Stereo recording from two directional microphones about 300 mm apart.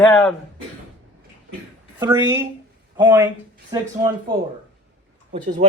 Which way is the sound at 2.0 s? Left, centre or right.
Centre.